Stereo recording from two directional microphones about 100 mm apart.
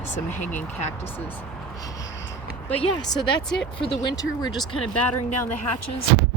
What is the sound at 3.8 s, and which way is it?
Speech, 55° left (ahead or behind).